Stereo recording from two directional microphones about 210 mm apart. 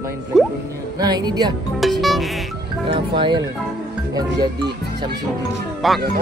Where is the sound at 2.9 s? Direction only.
20° right (ahead or behind).